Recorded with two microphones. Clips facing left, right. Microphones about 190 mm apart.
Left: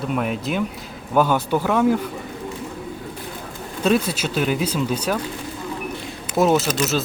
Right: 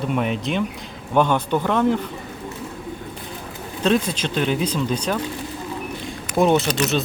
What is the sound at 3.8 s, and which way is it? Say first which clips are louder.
Speech: even; 5° left (ahead or behind).